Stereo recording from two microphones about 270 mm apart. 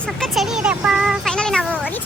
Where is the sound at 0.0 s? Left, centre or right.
Centre.